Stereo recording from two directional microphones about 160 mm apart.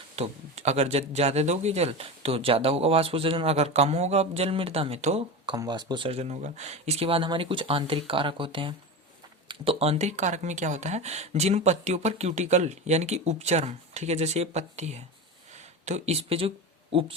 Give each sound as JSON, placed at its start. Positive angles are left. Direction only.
{"t": 0.2, "sound": "speech", "side_deg": -40}
{"t": 5.5, "sound": "speech", "side_deg": -25}